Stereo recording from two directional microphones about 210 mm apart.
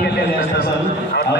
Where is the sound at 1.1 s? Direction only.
50° left (ahead or behind).